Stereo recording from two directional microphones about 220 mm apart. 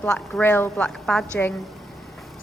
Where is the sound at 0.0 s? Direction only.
5° left (ahead or behind).